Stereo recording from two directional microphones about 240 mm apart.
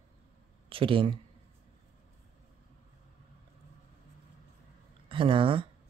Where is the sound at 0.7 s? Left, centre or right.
Right.